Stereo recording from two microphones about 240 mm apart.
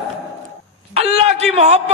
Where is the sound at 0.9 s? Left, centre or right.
Right.